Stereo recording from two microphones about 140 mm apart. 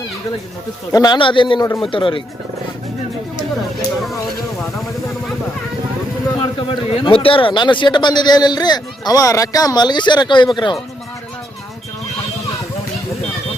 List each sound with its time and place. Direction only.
0.9 s a man's voice: 30° left (ahead or behind)
6.4 s a man's voice: 40° left (ahead or behind)